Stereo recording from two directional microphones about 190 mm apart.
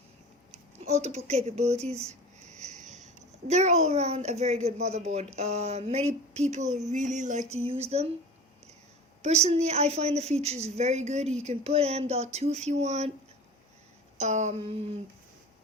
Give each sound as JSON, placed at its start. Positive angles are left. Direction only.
{"t": 0.8, "sound": "a woman's voice", "side_deg": -35}
{"t": 9.2, "sound": "a woman's voice", "side_deg": -35}
{"t": 14.2, "sound": "a woman's voice", "side_deg": -40}